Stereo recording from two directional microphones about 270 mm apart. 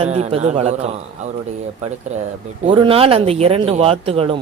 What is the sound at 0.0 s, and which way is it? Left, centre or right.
Speech, right.